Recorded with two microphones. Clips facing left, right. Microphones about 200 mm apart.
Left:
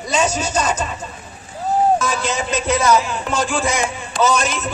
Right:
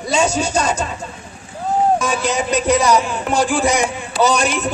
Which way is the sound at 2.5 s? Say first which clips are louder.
Right 1 dB; 15° right (ahead or behind).